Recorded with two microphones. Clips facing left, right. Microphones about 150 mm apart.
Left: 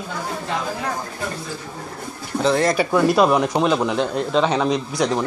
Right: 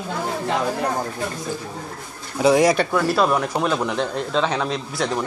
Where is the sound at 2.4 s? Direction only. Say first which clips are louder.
Right 3 dB; 10° right (ahead or behind).